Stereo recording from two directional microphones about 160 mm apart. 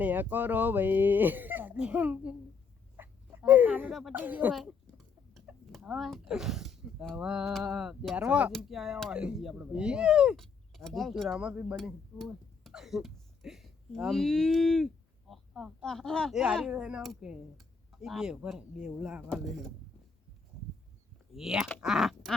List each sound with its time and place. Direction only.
0.0 s speech: 10° right (ahead or behind)
2.9 s a sound: 15° right (ahead or behind)
4.2 s speech: 10° right (ahead or behind)
4.5 s speech: centre (ahead or behind)
21.3 s speech: 5° right (ahead or behind)